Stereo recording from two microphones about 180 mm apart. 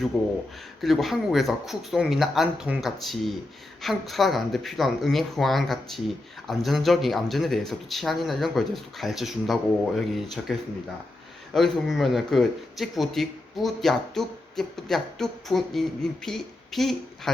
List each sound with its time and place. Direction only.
0.1 s speech: centre (ahead or behind)
11.5 s a woman's voice: centre (ahead or behind)